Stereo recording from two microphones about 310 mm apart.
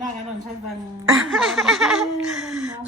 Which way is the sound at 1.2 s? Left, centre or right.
Centre.